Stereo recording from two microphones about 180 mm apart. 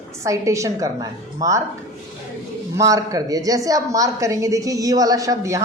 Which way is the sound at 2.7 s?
20° right (ahead or behind).